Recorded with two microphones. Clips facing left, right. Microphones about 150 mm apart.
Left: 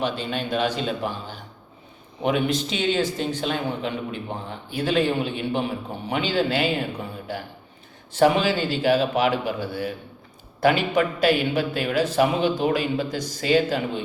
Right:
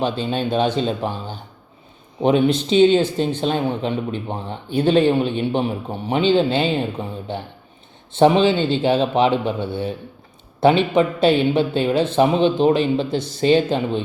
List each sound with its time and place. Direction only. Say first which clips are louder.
0.0 s speech: right 5 dB; 30° right (ahead or behind)